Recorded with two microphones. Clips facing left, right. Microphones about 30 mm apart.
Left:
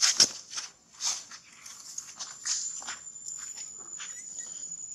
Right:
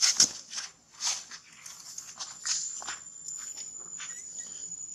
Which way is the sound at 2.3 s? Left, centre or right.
Right.